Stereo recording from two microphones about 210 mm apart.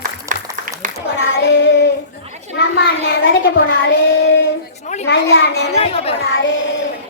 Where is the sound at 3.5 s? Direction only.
55° left (ahead or behind).